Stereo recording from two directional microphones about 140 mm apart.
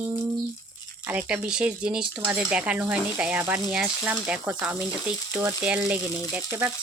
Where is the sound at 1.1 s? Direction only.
10° right (ahead or behind).